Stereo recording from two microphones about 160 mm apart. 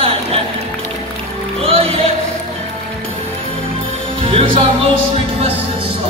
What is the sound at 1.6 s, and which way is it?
Music, 35° right (ahead or behind).